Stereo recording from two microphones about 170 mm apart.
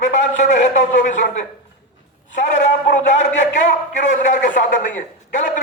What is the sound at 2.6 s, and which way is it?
A man's voice, 45° left (ahead or behind).